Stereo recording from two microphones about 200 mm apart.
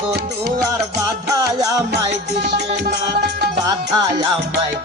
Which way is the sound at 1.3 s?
15° right (ahead or behind).